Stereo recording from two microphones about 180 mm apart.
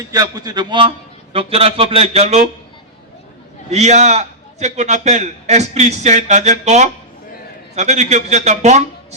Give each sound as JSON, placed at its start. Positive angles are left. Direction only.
{"t": 0.1, "sound": "a man's voice", "side_deg": -20}
{"t": 3.7, "sound": "a man's voice", "side_deg": -40}